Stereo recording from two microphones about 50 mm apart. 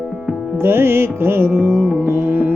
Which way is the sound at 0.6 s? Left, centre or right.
Right.